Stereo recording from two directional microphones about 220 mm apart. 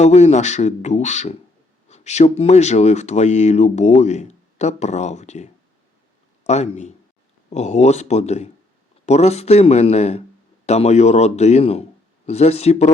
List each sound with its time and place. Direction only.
0.0 s a man's voice: 30° left (ahead or behind)